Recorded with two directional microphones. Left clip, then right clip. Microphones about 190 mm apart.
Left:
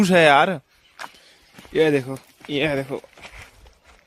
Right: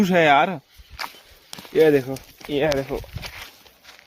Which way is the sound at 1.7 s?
30° left (ahead or behind).